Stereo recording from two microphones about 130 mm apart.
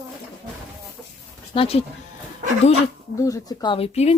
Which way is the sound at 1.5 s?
45° left (ahead or behind).